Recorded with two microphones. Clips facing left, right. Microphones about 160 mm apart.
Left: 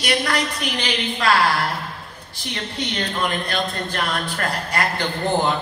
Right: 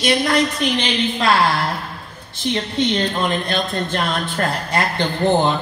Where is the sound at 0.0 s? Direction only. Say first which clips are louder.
Right 5 dB; 25° right (ahead or behind).